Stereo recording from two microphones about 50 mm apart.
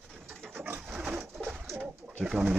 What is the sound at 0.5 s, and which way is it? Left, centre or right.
Pigeon, right.